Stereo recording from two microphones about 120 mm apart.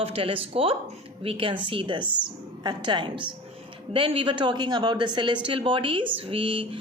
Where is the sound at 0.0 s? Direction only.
50° right (ahead or behind).